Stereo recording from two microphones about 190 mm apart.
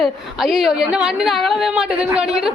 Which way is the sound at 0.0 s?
Centre (ahead or behind).